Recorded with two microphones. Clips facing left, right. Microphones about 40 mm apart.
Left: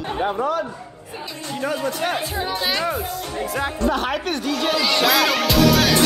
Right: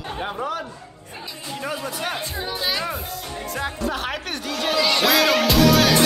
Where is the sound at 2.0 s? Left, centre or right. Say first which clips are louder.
Left 4 dB; centre.